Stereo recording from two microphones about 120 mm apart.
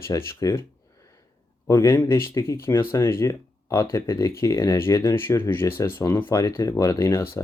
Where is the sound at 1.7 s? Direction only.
20° left (ahead or behind).